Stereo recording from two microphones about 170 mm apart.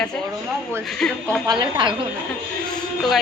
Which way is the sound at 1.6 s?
25° right (ahead or behind).